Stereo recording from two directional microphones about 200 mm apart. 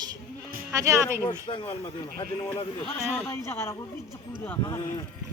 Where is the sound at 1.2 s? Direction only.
20° left (ahead or behind).